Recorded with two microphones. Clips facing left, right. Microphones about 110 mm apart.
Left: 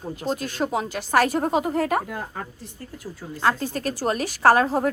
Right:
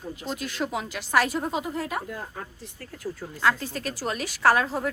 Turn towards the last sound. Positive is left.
turn(degrees=40)  # may be behind; listen again after turning